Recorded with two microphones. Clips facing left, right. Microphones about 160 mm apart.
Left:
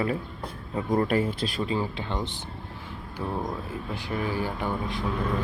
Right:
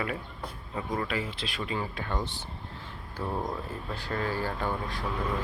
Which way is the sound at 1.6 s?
25° left (ahead or behind).